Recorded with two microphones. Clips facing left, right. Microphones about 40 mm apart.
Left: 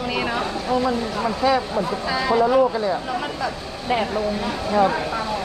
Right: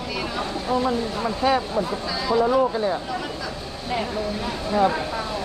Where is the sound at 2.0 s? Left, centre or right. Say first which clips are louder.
Left 3 dB; left.